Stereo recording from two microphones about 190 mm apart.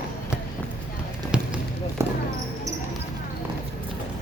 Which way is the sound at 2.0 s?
15° right (ahead or behind).